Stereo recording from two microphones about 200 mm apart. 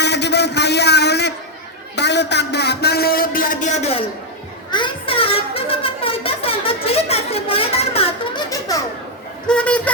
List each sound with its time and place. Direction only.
0.0 s a sound: 55° left (ahead or behind)
2.0 s a man's voice: 55° left (ahead or behind); by 8.3 s 25° left (ahead or behind)
8.4 s baby laughter: 15° left (ahead or behind)
9.5 s speech: 5° left (ahead or behind)